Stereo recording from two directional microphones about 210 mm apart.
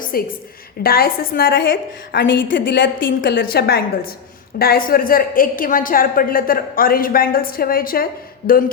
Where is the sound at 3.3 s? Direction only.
50° left (ahead or behind).